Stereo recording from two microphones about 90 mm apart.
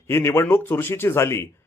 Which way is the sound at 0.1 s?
30° left (ahead or behind).